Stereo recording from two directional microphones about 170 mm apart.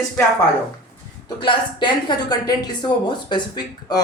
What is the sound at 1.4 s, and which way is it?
Speech, 30° left (ahead or behind).